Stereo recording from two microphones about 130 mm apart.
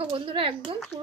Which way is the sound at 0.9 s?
35° right (ahead or behind).